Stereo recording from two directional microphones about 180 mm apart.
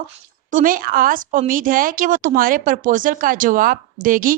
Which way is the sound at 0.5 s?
50° right (ahead or behind).